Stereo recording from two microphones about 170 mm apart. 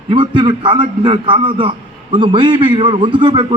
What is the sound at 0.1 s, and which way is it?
A man's voice, 30° right (ahead or behind).